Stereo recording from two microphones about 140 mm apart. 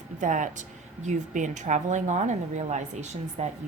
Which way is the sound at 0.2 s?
65° right (ahead or behind).